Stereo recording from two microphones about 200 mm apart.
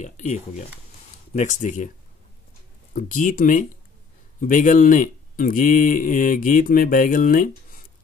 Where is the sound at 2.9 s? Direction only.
40° left (ahead or behind).